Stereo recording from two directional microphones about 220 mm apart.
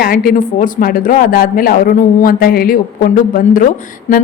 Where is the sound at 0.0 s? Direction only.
40° left (ahead or behind).